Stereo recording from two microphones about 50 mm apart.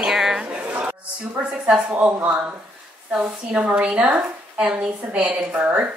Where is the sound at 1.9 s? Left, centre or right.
Right.